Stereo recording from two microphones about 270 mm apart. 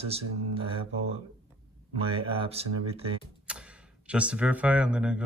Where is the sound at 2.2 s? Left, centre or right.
Centre.